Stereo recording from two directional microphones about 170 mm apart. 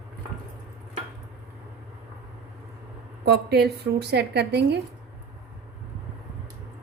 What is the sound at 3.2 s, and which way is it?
A woman's voice, 70° right (ahead or behind).